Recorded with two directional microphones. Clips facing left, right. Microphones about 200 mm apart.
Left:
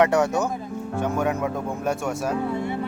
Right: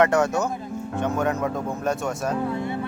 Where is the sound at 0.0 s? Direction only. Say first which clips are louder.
Even; 15° left (ahead or behind).